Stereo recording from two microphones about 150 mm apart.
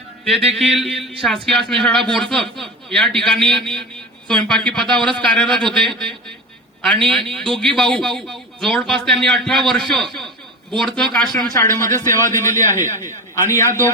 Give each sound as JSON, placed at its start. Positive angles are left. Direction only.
{"t": 0.3, "sound": "a man's voice", "side_deg": 0}
{"t": 11.5, "sound": "a man's voice", "side_deg": 20}